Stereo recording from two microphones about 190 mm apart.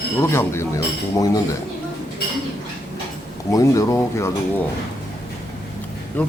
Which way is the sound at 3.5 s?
15° left (ahead or behind).